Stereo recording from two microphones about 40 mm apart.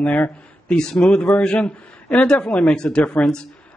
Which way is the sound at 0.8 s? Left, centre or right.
Centre.